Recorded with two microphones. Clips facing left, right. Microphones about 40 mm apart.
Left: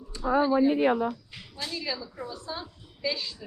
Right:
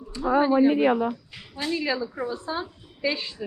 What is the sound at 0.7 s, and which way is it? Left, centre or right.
Speech, right.